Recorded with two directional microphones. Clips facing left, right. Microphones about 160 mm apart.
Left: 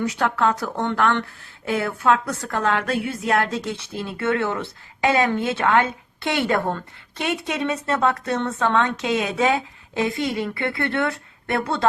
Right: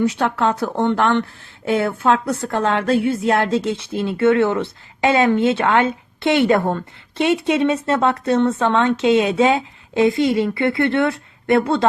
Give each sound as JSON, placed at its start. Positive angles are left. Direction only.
{"t": 0.0, "sound": "a woman's voice", "side_deg": -25}